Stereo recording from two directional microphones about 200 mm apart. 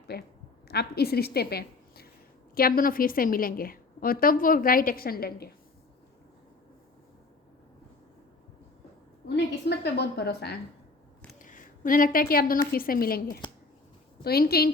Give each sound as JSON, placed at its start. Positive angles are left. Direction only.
{"t": 0.1, "sound": "a woman's voice", "side_deg": 50}
{"t": 9.2, "sound": "a woman's voice", "side_deg": 55}
{"t": 11.3, "sound": "a woman's voice", "side_deg": 45}
{"t": 14.3, "sound": "a woman's voice", "side_deg": 50}